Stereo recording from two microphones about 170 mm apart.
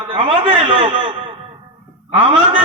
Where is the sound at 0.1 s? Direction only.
35° right (ahead or behind).